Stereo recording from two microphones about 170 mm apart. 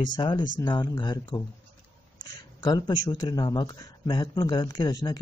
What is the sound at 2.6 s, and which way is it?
Speech, 25° left (ahead or behind).